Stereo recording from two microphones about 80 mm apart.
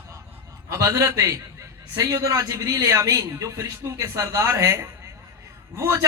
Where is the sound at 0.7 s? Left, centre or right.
Right.